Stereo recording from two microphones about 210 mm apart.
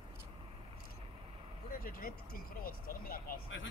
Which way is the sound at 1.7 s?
45° left (ahead or behind).